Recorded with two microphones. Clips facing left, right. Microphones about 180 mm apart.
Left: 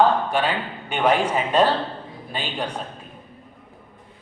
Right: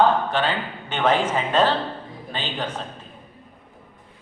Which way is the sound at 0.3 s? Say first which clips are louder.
Left 1 dB; 10° left (ahead or behind).